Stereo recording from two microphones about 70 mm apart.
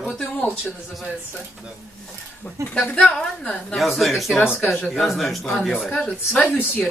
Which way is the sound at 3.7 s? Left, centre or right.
Centre.